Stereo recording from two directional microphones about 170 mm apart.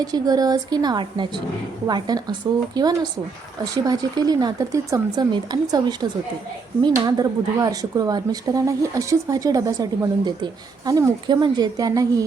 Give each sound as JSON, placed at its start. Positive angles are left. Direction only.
{"t": 0.0, "sound": "speech", "side_deg": -20}